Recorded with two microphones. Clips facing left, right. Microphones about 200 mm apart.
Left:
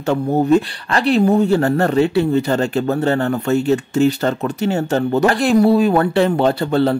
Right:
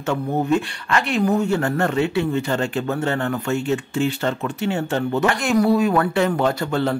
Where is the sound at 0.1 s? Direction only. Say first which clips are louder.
Left 6 dB; 35° left (ahead or behind).